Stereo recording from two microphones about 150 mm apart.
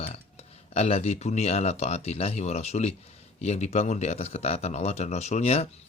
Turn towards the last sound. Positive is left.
turn(degrees=45)  # may be behind; listen again after turning